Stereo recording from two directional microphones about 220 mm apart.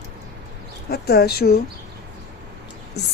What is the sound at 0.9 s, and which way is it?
Speech, 45° left (ahead or behind).